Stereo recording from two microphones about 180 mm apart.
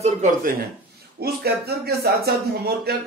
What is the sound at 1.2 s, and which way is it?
Speech, 60° right (ahead or behind).